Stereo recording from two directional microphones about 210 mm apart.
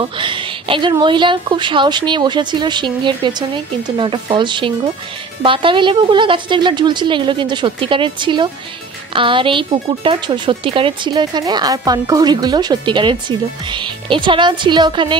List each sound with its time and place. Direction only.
0.0 s speech: 25° right (ahead or behind)